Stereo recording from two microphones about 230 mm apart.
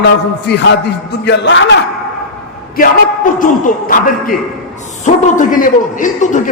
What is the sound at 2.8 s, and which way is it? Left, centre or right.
Speech, left.